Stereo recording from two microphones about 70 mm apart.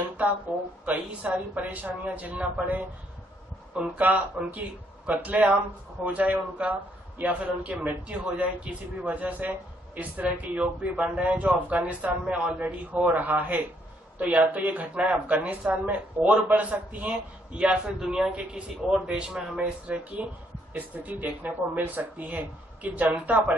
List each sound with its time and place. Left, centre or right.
0.5 s speech: right
3.7 s a man's voice: centre